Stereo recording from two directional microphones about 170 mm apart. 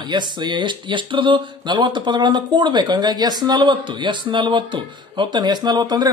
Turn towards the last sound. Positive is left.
turn(degrees=-25)  # may be behind; listen again after turning